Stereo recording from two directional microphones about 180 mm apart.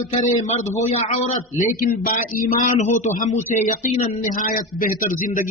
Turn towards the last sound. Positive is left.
turn(degrees=45)  # may be behind; listen again after turning